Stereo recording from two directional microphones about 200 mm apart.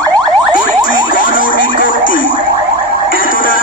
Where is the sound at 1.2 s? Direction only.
45° left (ahead or behind).